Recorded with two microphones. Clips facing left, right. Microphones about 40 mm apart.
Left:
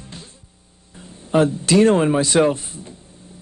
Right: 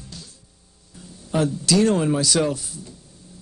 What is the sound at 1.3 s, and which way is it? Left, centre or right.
Speech, left.